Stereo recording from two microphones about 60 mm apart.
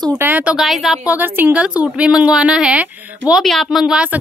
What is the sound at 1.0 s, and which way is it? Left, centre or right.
Speech, right.